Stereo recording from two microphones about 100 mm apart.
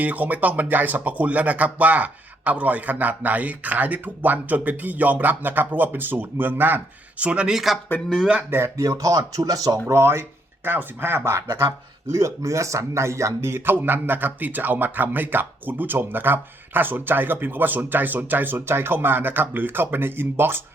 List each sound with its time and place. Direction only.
0.0 s speech: 15° right (ahead or behind)
8.4 s speech: 25° right (ahead or behind)
8.8 s speech: 35° right (ahead or behind)